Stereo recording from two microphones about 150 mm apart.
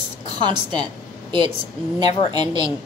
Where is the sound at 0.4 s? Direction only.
30° right (ahead or behind).